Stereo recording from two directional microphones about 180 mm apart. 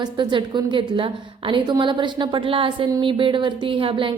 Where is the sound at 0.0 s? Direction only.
25° right (ahead or behind).